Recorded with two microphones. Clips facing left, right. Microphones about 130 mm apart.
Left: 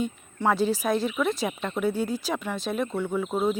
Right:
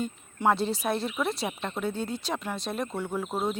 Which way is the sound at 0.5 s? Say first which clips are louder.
Left 4 dB; centre (ahead or behind).